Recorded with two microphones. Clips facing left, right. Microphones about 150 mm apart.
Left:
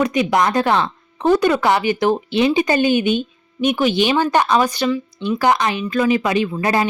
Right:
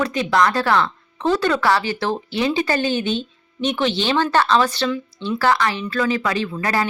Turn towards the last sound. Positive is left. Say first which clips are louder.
# left 4 dB
turn(degrees=20)  # may be behind; listen again after turning